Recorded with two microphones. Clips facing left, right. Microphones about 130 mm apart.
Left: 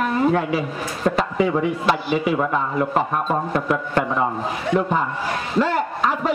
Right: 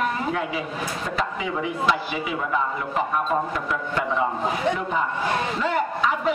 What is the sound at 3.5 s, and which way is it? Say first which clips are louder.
Speech: left 5 dB; 55° left (ahead or behind).